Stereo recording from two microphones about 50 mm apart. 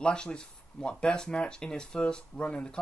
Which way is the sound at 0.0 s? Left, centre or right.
Centre.